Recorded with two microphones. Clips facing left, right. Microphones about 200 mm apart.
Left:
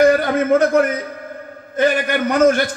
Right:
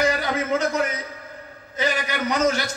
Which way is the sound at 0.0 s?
55° left (ahead or behind).